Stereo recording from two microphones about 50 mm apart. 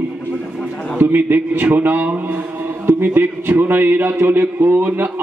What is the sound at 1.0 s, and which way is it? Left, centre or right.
A man's voice, right.